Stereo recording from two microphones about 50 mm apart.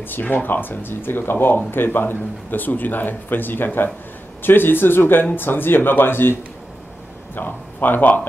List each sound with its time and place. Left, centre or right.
0.0 s speech: left
7.3 s speech: left